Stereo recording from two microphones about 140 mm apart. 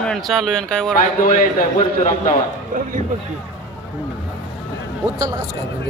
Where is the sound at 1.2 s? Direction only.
80° left.